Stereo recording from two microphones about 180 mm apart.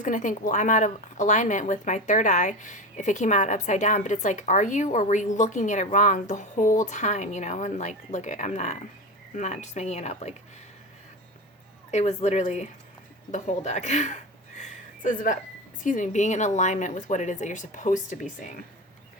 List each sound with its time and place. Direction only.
0.0 s a woman's voice: 45° left (ahead or behind)
11.9 s a woman's voice: 40° left (ahead or behind)